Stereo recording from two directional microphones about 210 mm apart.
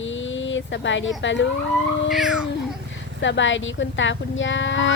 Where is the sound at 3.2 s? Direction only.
60° left (ahead or behind).